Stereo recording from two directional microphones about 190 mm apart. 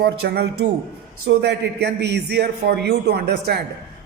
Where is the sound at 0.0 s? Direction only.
55° right (ahead or behind).